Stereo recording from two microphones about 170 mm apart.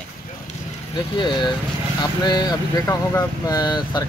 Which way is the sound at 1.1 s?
25° left (ahead or behind).